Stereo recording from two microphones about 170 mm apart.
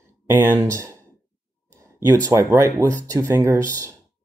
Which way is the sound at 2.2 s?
15° right (ahead or behind).